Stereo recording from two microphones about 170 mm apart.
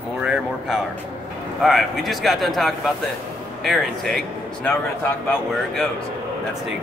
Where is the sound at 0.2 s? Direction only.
5° right (ahead or behind).